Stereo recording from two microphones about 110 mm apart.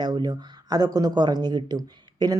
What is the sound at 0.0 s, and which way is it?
Speech, 40° right (ahead or behind).